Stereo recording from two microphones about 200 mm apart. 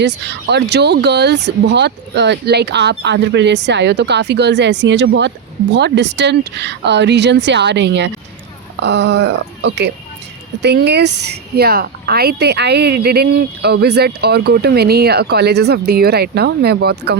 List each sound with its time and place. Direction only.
0.0 s speech: 60° right (ahead or behind)